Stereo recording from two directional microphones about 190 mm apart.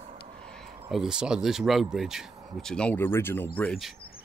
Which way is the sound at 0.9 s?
Centre (ahead or behind).